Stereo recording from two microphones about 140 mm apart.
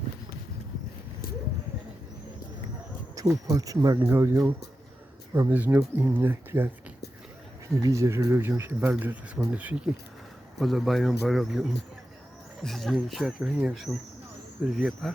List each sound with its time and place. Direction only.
3.2 s speech: 25° right (ahead or behind)
7.8 s speech: 20° right (ahead or behind); by 11.6 s centre (ahead or behind)
12.6 s speech: centre (ahead or behind)